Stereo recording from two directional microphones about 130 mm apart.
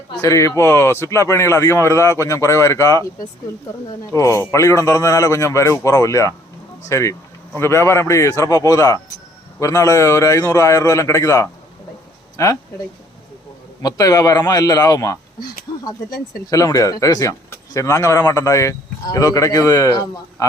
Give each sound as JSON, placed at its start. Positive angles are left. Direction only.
{"t": 0.2, "sound": "speech", "side_deg": 25}
{"t": 13.8, "sound": "speech", "side_deg": 30}